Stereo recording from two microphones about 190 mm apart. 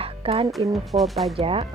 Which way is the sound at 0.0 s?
30° right (ahead or behind).